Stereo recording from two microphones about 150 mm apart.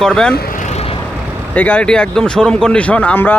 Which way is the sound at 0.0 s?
5° left (ahead or behind).